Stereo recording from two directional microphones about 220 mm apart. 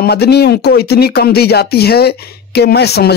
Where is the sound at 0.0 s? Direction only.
45° left (ahead or behind).